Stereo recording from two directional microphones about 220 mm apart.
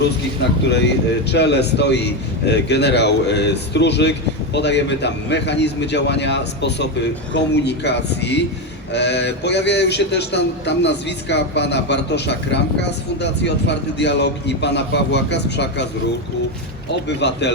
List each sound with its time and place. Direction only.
0.7 s a man's voice: 50° left (ahead or behind)
17.2 s a man's voice: 50° left (ahead or behind)